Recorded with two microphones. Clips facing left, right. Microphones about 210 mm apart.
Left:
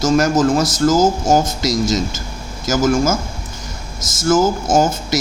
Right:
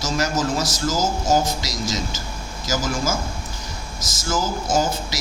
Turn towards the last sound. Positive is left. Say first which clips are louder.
# left 6 dB
turn(degrees=50)  # may be behind; listen again after turning